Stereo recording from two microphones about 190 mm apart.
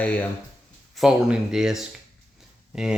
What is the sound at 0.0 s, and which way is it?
Speech, 10° left (ahead or behind).